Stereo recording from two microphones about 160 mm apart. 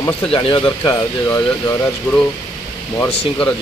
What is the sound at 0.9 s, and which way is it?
Speech, 15° left (ahead or behind).